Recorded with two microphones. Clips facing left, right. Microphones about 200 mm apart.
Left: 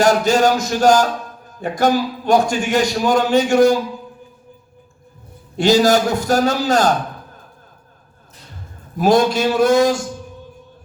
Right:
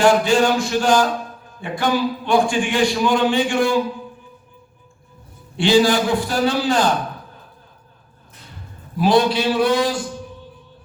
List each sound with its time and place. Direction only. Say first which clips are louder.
0.0 s a man's voice: left 1 dB; 40° left (ahead or behind)
5.5 s a man's voice: left 2 dB; 40° left (ahead or behind)
9.0 s a man's voice: left 2 dB; 45° left (ahead or behind)